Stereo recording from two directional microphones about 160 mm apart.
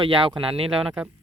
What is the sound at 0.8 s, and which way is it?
Speech, 5° right (ahead or behind).